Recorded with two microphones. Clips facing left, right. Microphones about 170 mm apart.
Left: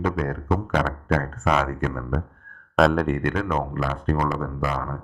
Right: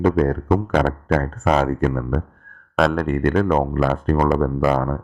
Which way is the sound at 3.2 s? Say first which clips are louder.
Right 7 dB; 40° right (ahead or behind).